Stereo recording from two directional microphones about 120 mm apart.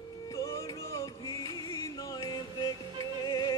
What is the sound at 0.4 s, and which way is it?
Music, 25° left (ahead or behind).